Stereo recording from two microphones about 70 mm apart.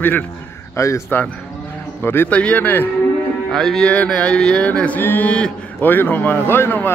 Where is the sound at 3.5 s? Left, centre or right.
Centre.